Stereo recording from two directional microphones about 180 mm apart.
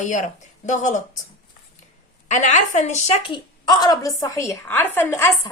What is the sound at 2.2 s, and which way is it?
A woman's voice, 45° left (ahead or behind).